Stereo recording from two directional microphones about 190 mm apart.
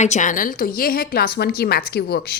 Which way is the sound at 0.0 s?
40° left (ahead or behind).